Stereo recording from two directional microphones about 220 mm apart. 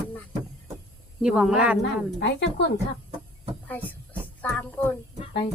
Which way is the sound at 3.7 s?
5° left (ahead or behind).